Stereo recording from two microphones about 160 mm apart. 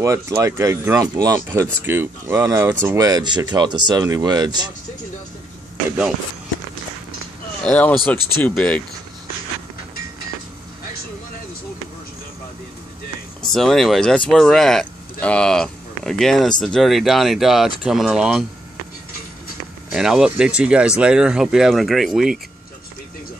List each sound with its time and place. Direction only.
0.0 s speech: 20° right (ahead or behind)
7.6 s speech: 10° left (ahead or behind)
13.4 s speech: centre (ahead or behind)
19.9 s speech: 5° right (ahead or behind)